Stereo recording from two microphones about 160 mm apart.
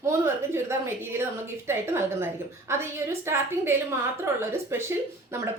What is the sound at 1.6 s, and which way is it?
A woman's voice, 15° right (ahead or behind).